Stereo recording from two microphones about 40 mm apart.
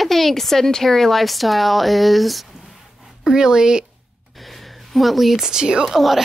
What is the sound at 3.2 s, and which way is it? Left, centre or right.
Speech, centre.